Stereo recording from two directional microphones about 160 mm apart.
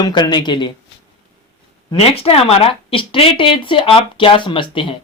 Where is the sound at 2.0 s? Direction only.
35° left (ahead or behind).